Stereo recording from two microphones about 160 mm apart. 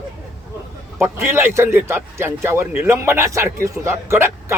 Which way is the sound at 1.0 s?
15° right (ahead or behind).